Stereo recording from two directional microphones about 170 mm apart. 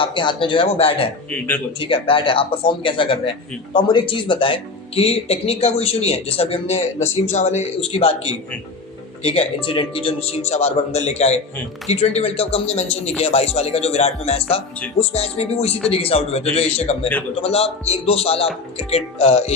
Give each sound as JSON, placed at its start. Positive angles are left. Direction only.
{"t": 0.0, "sound": "speech", "side_deg": 30}
{"t": 1.3, "sound": "speech", "side_deg": 10}
{"t": 1.8, "sound": "speech", "side_deg": 30}